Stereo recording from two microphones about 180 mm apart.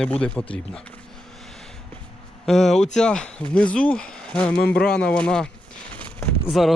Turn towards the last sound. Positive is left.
turn(degrees=0)  # may be behind; listen again after turning